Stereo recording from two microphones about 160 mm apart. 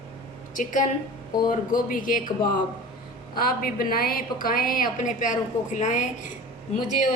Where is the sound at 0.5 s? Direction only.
55° left (ahead or behind).